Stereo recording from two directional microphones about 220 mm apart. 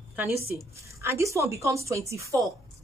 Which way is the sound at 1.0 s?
15° right (ahead or behind).